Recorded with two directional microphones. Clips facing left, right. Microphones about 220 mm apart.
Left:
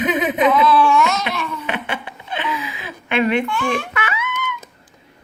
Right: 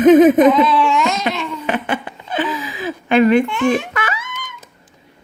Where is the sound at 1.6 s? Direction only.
45° right (ahead or behind).